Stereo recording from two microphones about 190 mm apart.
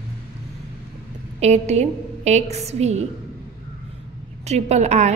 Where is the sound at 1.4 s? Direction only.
35° right (ahead or behind).